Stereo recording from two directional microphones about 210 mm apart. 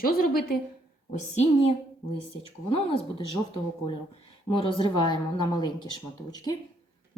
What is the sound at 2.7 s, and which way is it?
Speech, 25° left (ahead or behind).